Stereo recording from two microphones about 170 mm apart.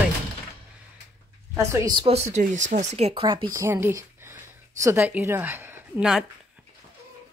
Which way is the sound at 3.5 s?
15° right (ahead or behind).